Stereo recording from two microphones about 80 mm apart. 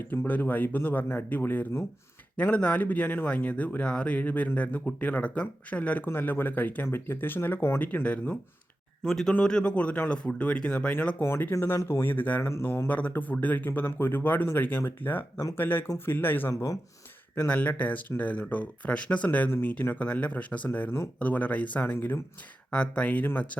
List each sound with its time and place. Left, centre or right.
0.0 s speech: left
9.0 s speech: centre
11.2 s speech: left
12.4 s speech: left
12.6 s speech: left
16.5 s speech: left
17.3 s speech: left
19.5 s speech: left